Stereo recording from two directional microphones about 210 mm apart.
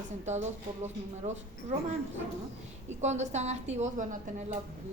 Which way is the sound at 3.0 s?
35° right (ahead or behind).